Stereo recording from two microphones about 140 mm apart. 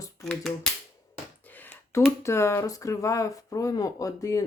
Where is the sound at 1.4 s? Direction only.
15° left (ahead or behind).